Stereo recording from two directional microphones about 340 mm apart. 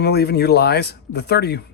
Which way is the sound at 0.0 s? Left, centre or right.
Left.